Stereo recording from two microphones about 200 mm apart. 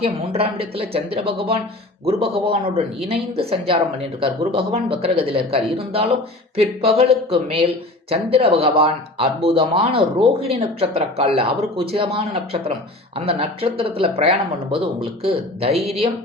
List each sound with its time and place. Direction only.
0.0 s speech: 30° right (ahead or behind)